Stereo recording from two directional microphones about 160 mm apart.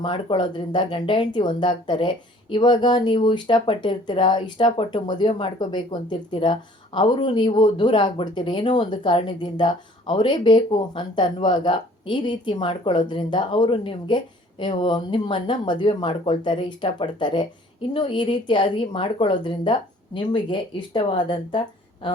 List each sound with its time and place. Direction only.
0.0 s a woman's voice: 30° left (ahead or behind)